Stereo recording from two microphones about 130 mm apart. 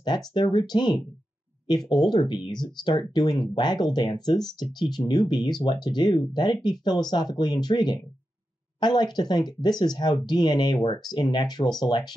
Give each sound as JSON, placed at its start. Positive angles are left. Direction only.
{"t": 0.0, "sound": "speech", "side_deg": 35}